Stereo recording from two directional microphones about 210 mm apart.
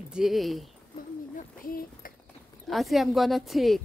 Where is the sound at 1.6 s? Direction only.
45° left (ahead or behind).